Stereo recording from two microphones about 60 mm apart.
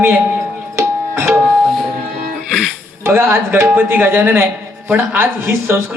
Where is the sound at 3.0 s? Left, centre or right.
Right.